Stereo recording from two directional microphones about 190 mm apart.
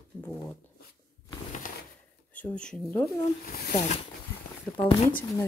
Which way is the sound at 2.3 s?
5° left (ahead or behind).